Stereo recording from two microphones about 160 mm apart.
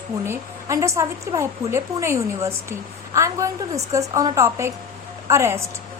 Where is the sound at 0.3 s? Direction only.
20° right (ahead or behind).